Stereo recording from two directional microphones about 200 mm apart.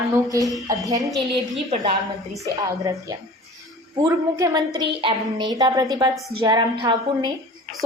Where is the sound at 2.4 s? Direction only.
15° right (ahead or behind).